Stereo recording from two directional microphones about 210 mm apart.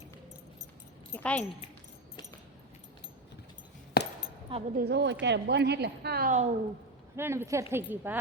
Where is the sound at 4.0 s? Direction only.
50° left (ahead or behind).